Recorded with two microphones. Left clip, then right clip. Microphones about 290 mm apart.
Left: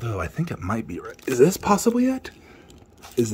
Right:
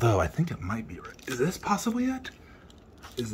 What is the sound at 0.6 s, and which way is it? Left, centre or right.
Speech, centre.